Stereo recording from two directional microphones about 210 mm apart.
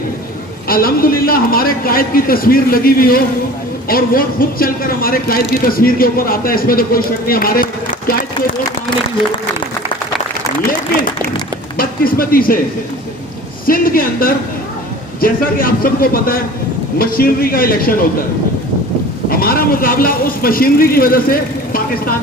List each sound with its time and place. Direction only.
0.7 s speech: 45° left (ahead or behind)
11.8 s speech: 45° left (ahead or behind)
13.7 s speech: 45° left (ahead or behind)
19.3 s speech: 45° left (ahead or behind)